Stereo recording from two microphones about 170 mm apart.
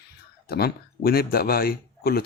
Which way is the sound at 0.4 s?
65° left (ahead or behind).